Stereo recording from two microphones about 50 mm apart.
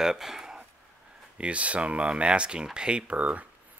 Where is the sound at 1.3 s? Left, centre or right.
Right.